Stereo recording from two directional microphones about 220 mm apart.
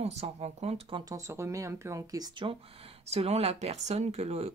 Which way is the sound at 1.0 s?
15° right (ahead or behind).